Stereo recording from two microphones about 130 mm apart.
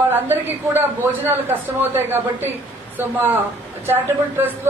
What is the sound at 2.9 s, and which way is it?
A man's voice, 15° right (ahead or behind).